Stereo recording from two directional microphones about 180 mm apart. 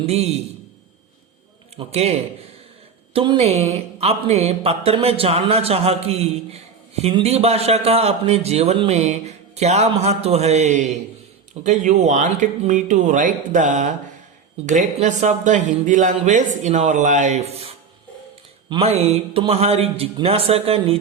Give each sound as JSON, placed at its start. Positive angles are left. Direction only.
{"t": 0.0, "sound": "speech", "side_deg": -35}
{"t": 1.7, "sound": "speech", "side_deg": -35}